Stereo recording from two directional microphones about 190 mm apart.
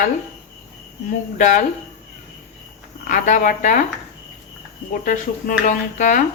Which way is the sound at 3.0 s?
45° left (ahead or behind).